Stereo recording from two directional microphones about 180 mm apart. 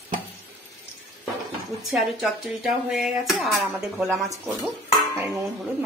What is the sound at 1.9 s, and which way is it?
A woman's voice, centre (ahead or behind).